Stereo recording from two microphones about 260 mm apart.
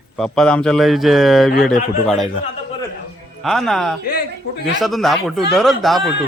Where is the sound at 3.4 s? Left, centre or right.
Centre.